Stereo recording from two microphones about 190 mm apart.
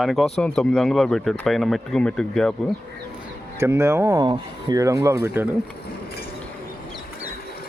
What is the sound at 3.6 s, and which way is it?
Speech, 15° right (ahead or behind).